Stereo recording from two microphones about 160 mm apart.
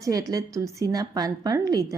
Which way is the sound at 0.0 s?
20° right (ahead or behind).